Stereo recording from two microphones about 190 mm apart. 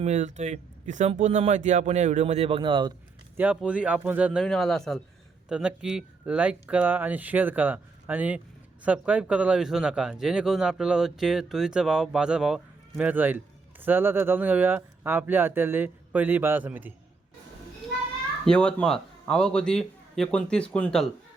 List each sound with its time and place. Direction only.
0.0 s speech: 35° right (ahead or behind)
3.3 s a man's voice: 5° right (ahead or behind)
18.4 s a man's voice: 5° left (ahead or behind)